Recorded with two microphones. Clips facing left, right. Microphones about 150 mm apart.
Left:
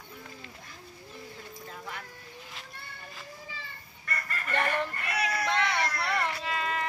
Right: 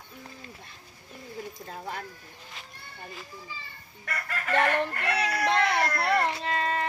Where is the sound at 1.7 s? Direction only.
35° right (ahead or behind).